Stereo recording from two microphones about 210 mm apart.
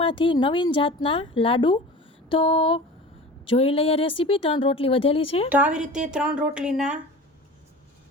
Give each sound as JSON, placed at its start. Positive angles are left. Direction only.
{"t": 0.0, "sound": "speech", "side_deg": 25}
{"t": 5.5, "sound": "speech", "side_deg": -5}